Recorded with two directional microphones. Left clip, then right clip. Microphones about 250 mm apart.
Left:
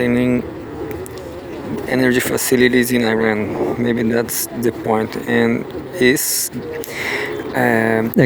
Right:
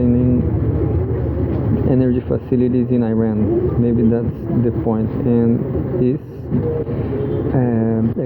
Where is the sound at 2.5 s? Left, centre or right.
Left.